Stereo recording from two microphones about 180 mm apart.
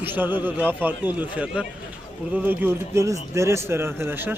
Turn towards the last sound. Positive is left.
turn(degrees=-10)  # may be behind; listen again after turning